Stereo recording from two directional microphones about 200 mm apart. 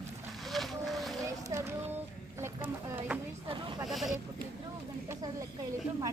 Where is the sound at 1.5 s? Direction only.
15° right (ahead or behind).